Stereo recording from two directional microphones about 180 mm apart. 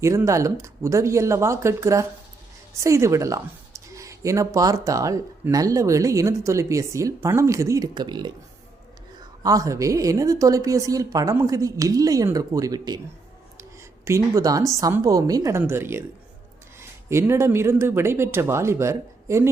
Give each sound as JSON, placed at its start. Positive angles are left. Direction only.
{"t": 0.0, "sound": "speech", "side_deg": -15}
{"t": 9.4, "sound": "a woman's voice", "side_deg": -20}
{"t": 17.1, "sound": "speech", "side_deg": -15}